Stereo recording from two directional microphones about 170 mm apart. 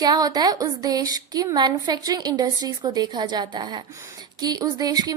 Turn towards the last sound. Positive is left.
turn(degrees=-20)  # may be behind; listen again after turning